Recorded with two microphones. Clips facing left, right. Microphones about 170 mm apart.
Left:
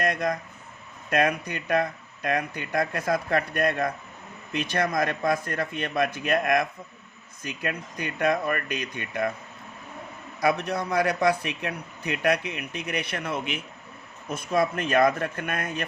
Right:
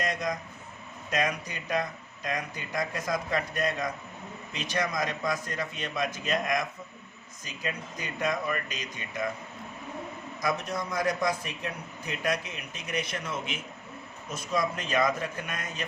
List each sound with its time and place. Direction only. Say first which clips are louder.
0.0 s a man's voice: left 5 dB; 60° left (ahead or behind)
10.4 s a man's voice: left 6 dB; 65° left (ahead or behind)